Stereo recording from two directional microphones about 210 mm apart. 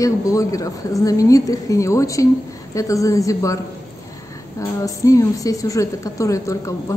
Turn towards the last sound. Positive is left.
turn(degrees=15)  # may be behind; listen again after turning